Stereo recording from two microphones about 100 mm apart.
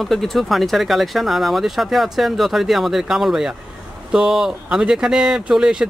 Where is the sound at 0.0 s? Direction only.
Centre (ahead or behind).